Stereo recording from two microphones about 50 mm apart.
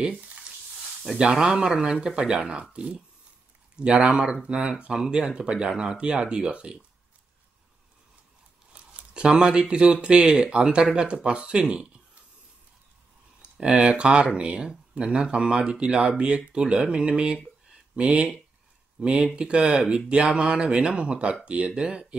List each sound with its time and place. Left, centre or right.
1.3 s speech: centre
5.7 s speech: centre
8.7 s speech: right
13.4 s speech: centre